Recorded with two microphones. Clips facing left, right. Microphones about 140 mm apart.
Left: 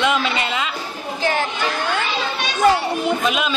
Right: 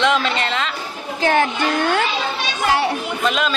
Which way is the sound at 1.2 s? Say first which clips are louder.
Right 4 dB; 55° right (ahead or behind).